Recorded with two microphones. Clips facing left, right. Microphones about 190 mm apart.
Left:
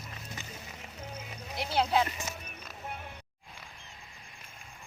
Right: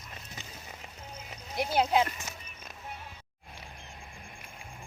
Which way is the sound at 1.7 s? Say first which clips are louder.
Right 1 dB; 15° right (ahead or behind).